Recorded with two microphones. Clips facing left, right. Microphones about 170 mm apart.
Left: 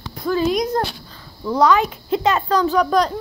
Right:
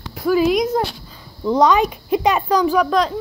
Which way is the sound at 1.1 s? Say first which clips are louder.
Right 3 dB; 20° right (ahead or behind).